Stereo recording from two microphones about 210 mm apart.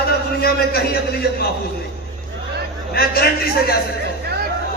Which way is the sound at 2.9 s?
45° left (ahead or behind).